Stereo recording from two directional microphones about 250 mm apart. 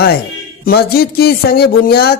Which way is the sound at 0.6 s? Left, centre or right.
Left.